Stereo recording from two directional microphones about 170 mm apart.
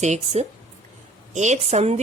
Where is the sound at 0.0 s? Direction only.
40° right (ahead or behind).